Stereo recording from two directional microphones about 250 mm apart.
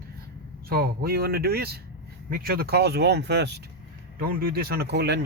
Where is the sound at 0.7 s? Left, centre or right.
Right.